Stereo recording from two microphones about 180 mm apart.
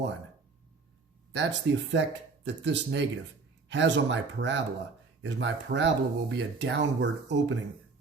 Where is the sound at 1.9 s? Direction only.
80° right.